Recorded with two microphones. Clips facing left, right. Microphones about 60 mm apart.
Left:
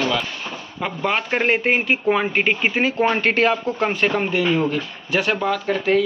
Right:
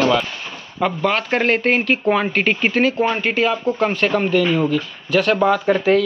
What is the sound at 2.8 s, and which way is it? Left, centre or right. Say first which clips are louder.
Speech: right 4 dB; left.